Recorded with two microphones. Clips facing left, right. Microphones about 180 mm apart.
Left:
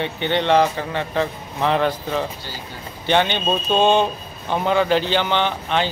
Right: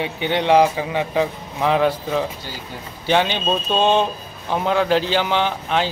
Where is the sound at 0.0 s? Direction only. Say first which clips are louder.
Even; 5° right (ahead or behind).